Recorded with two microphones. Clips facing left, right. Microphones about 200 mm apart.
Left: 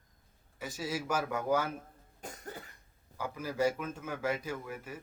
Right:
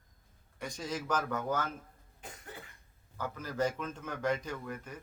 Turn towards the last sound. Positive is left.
turn(degrees=5)  # may be behind; listen again after turning